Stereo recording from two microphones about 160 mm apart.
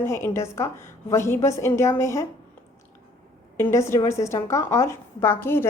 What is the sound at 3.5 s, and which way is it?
A woman's voice, 15° left (ahead or behind).